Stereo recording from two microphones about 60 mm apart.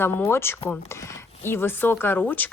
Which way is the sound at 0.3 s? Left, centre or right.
Left.